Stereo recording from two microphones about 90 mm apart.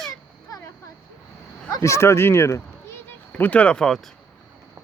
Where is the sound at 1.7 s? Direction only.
35° left (ahead or behind).